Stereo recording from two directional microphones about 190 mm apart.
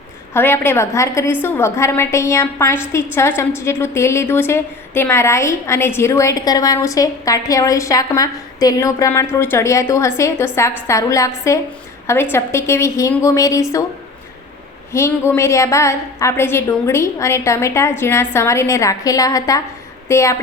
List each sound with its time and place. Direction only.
0.3 s a woman's voice: 10° left (ahead or behind)
14.9 s a woman's voice: 15° left (ahead or behind)